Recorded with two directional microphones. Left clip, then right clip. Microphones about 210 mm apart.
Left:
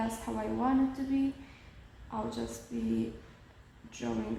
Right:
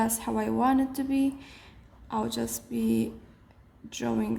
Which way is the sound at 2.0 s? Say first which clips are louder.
Right 6 dB; 45° right (ahead or behind).